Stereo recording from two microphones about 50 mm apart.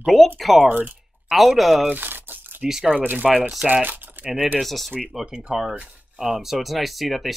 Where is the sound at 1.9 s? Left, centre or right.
Right.